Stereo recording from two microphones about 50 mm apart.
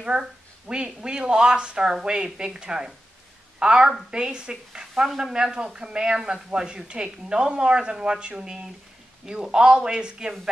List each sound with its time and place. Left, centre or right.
0.0 s a woman's voice: centre